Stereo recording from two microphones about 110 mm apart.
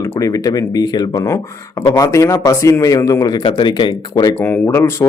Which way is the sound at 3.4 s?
45° left (ahead or behind).